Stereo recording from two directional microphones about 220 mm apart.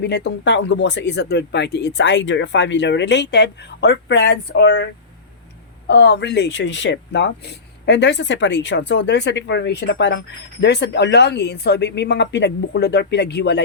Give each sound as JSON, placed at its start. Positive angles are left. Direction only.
{"t": 0.0, "sound": "speech", "side_deg": 50}
{"t": 5.9, "sound": "speech", "side_deg": 50}